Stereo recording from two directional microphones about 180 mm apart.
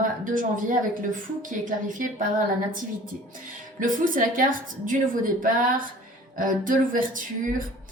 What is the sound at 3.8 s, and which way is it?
A woman's voice, 50° right (ahead or behind).